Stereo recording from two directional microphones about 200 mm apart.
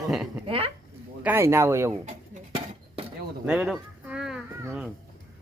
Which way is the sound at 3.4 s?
5° right (ahead or behind).